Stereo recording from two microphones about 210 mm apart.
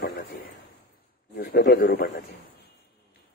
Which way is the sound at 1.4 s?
50° left (ahead or behind).